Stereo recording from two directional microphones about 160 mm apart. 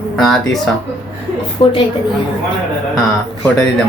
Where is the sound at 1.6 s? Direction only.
35° left (ahead or behind).